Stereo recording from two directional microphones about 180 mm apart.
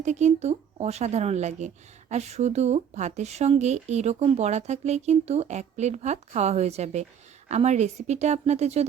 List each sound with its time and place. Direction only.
0.0 s speech: 40° right (ahead or behind)